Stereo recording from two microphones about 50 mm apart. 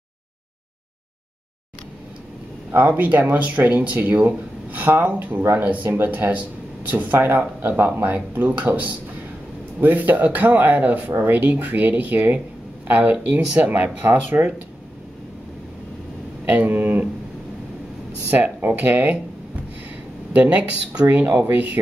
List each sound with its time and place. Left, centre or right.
2.9 s speech: right
16.4 s speech: right
18.3 s speech: right
20.3 s speech: right